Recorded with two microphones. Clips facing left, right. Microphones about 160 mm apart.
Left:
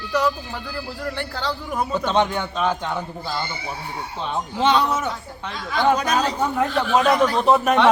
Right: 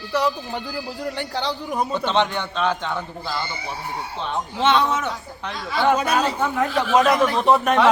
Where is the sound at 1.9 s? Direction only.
10° left (ahead or behind).